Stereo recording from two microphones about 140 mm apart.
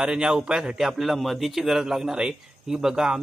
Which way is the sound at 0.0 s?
5° right (ahead or behind).